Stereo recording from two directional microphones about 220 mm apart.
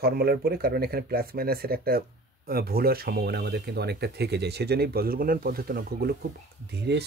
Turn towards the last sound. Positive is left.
turn(degrees=-50)  # may be behind; listen again after turning